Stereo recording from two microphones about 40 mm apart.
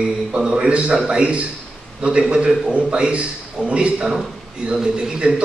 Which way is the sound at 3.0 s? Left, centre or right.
Right.